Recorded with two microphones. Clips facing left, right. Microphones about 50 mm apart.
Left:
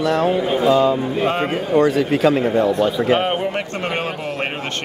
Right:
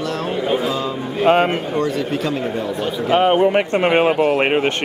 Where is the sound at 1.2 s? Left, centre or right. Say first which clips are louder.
Right 8 dB; right.